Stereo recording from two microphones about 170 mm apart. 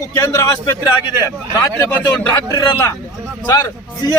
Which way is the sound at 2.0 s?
20° left (ahead or behind).